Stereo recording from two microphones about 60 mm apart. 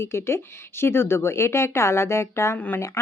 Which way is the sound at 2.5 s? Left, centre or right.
Left.